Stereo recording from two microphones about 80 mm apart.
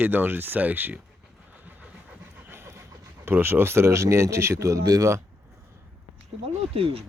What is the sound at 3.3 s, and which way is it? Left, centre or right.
Speech, right.